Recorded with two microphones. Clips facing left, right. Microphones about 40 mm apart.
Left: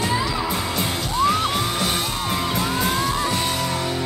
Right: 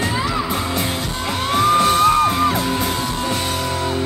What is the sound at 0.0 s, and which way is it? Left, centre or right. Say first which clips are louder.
Music: right 2 dB; right.